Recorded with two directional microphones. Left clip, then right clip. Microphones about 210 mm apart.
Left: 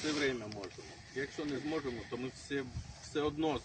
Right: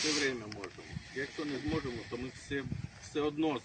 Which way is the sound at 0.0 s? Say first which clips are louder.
Right 2 dB; 10° left (ahead or behind).